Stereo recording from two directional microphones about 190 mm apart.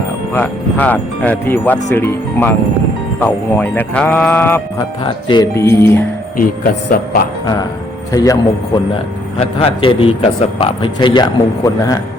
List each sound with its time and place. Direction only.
0.3 s speech: 10° left (ahead or behind)
5.0 s a man's voice: 25° left (ahead or behind)
5.5 s speech: 15° left (ahead or behind)
7.4 s a man's voice: 20° left (ahead or behind)
9.4 s a man's voice: 30° left (ahead or behind)